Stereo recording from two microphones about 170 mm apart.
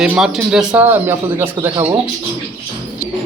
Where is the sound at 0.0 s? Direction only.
5° right (ahead or behind).